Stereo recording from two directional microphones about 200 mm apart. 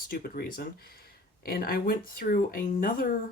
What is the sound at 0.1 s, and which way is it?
Speech, 45° left (ahead or behind).